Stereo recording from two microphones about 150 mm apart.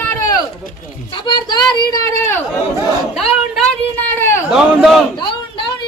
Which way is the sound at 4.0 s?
15° left (ahead or behind).